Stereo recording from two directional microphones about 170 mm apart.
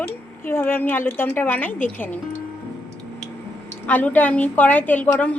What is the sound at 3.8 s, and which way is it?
A woman's voice, 10° left (ahead or behind).